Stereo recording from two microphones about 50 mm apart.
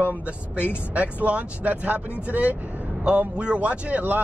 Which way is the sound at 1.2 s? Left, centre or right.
Right.